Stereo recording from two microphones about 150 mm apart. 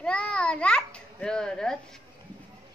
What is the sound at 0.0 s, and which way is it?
A child's voice, 5° left (ahead or behind).